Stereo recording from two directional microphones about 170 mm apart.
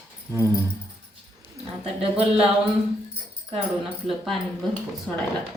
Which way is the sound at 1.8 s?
35° right (ahead or behind).